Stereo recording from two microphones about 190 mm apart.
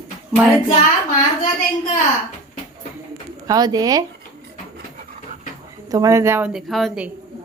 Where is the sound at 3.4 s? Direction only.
20° right (ahead or behind).